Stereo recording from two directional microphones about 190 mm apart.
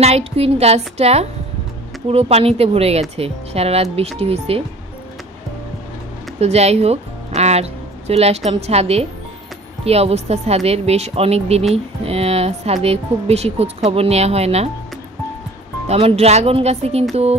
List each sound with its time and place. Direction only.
0.0 s a woman's voice: 35° right (ahead or behind)
6.4 s a woman's voice: 35° right (ahead or behind)
15.9 s a woman's voice: 30° right (ahead or behind)